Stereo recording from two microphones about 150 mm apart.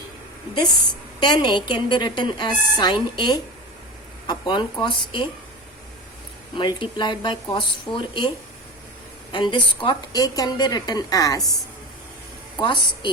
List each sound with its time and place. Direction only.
1.2 s a woman's voice: 30° left (ahead or behind)
6.6 s a woman's voice: 30° left (ahead or behind)
9.3 s a woman's voice: 30° left (ahead or behind)
12.5 s a woman's voice: 30° left (ahead or behind)